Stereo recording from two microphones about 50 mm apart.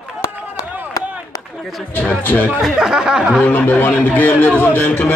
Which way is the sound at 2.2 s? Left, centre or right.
Left.